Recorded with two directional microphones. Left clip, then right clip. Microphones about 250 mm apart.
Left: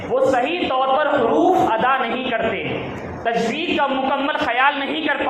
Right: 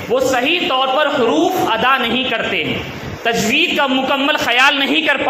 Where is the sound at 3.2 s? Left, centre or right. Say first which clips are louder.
Right 6 dB; right.